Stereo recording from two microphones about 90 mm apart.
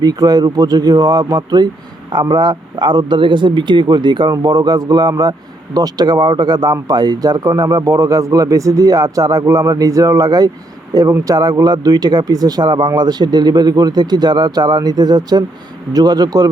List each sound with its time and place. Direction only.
0.0 s speech: 45° right (ahead or behind)